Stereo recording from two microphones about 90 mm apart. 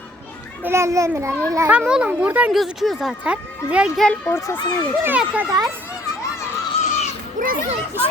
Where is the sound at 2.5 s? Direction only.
Centre (ahead or behind).